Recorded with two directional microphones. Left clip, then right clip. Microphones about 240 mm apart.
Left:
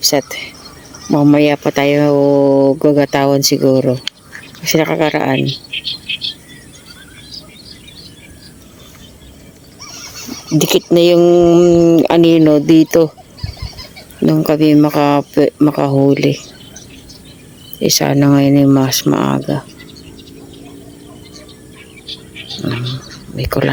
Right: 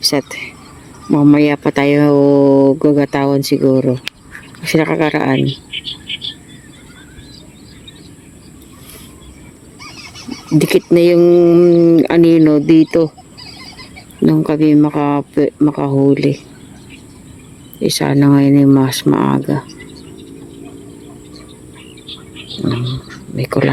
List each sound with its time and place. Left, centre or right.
0.0 s speech: centre
5.4 s speech: left
10.6 s speech: centre
14.2 s speech: centre
17.7 s speech: centre
22.0 s whispering: left
23.3 s speech: centre